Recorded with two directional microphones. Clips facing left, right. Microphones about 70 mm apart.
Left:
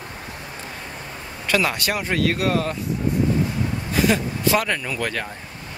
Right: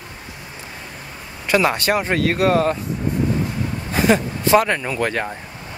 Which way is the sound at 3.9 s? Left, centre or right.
Right.